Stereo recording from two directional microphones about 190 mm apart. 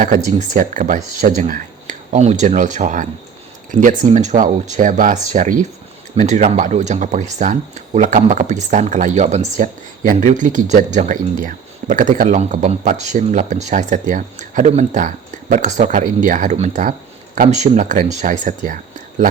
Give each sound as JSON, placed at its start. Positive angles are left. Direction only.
{"t": 0.3, "sound": "speech", "side_deg": -40}